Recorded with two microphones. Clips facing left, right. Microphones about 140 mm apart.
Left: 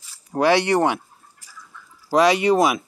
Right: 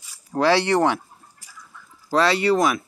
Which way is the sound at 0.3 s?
20° left (ahead or behind).